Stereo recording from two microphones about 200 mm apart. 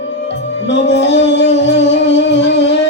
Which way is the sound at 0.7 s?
60° left (ahead or behind).